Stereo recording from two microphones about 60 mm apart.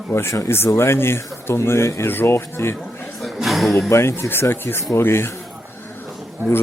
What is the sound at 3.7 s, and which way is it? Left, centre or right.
Speech, left.